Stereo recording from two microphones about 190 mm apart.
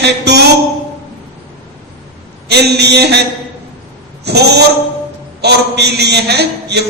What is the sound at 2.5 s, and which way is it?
Mantra, 60° right (ahead or behind).